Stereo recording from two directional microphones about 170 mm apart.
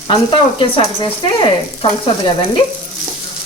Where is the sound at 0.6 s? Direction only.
30° left (ahead or behind).